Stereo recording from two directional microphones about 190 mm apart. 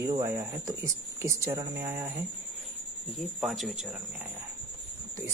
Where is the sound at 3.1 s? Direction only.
Centre (ahead or behind).